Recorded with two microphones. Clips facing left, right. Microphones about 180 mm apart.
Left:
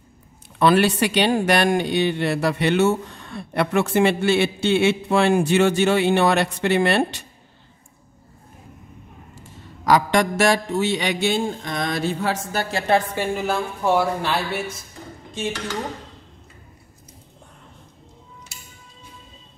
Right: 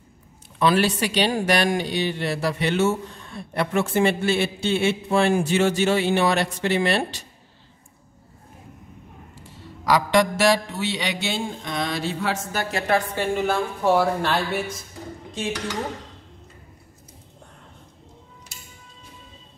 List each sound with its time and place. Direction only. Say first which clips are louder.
0.6 s speech: left 3 dB; 60° left (ahead or behind)
9.3 s a sound: even; 45° left (ahead or behind); by 13.0 s 30° left (ahead or behind)
13.1 s a woman's voice: right 1 dB; 10° left (ahead or behind)
13.5 s speech: even; centre (ahead or behind)